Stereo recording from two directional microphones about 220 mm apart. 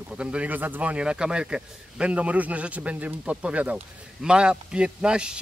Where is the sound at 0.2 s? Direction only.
5° right (ahead or behind).